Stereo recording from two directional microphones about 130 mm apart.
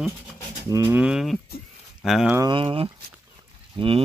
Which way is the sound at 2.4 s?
40° right (ahead or behind).